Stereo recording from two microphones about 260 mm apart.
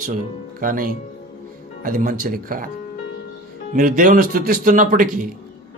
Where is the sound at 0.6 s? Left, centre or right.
Right.